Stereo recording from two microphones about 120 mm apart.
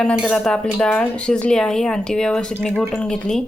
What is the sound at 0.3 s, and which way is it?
Speech, 10° left (ahead or behind).